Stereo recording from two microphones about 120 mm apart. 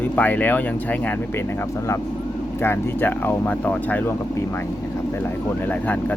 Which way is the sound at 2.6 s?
20° left (ahead or behind).